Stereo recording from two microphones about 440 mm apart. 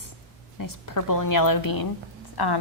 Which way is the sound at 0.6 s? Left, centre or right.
Left.